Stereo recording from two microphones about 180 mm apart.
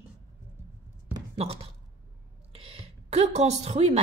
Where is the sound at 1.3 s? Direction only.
35° right (ahead or behind).